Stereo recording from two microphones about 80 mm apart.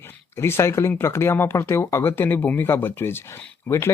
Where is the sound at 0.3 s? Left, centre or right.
Left.